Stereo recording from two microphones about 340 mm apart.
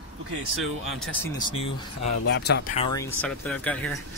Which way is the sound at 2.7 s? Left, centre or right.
Centre.